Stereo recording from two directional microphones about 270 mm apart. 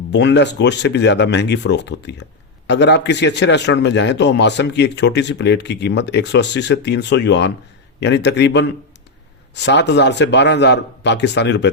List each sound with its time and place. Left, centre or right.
0.1 s a man's voice: left